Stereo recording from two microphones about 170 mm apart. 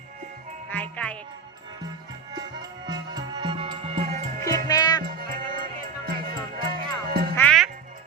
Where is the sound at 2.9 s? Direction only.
25° right (ahead or behind).